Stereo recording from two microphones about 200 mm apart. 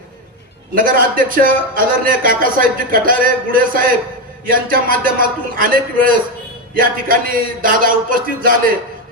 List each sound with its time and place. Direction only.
0.8 s a man's voice: 45° right (ahead or behind)